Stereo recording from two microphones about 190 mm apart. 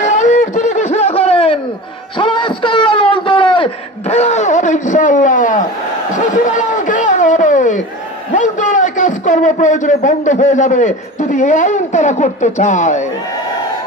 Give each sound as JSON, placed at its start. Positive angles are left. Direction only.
{"t": 0.0, "sound": "snicker", "side_deg": 40}
{"t": 2.1, "sound": "a sound", "side_deg": 25}
{"t": 8.4, "sound": "a man's voice", "side_deg": 40}